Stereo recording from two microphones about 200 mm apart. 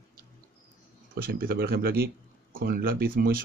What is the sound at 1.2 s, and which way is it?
Speech, 50° right (ahead or behind).